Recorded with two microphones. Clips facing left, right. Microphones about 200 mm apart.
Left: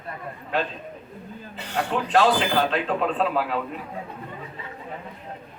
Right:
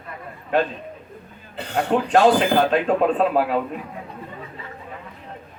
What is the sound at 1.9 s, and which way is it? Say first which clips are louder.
A man's voice: right 5 dB; 45° right (ahead or behind).